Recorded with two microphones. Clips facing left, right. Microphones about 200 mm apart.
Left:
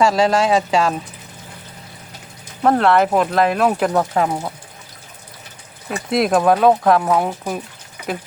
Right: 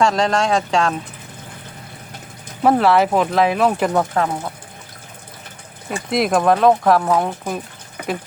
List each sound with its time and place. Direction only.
0.0 s speech: 5° left (ahead or behind)
2.6 s speech: 5° right (ahead or behind)
6.1 s speech: centre (ahead or behind)
8.0 s a sound: 55° right (ahead or behind)